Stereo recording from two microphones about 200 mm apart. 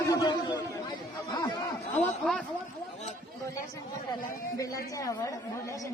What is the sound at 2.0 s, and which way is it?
Speech, centre (ahead or behind).